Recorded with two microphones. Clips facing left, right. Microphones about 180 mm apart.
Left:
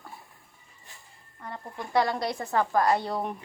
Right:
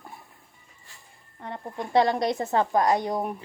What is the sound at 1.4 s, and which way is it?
A woman's voice, 20° right (ahead or behind).